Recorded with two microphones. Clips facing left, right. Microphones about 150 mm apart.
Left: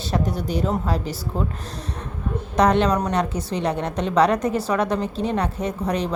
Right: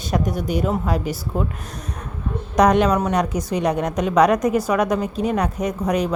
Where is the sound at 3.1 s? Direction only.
15° right (ahead or behind).